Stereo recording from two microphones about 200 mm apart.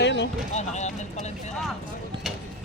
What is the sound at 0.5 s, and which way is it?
Speech, 35° left (ahead or behind).